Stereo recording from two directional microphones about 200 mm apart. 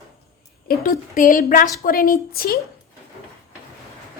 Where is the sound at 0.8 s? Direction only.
45° left (ahead or behind).